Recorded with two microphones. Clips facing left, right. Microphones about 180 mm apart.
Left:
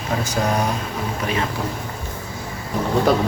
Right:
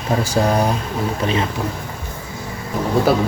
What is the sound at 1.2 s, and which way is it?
Speech, 30° right (ahead or behind).